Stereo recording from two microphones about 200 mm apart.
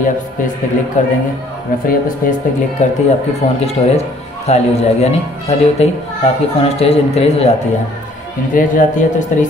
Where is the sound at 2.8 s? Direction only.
35° left (ahead or behind).